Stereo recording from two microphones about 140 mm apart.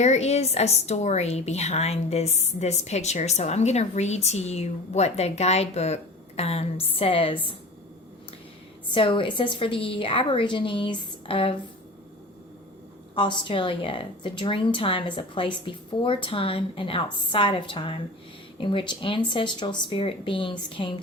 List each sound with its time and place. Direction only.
0.0 s a woman's voice: 50° left (ahead or behind)
8.9 s a woman's voice: 40° left (ahead or behind)
13.1 s a woman's voice: 35° left (ahead or behind)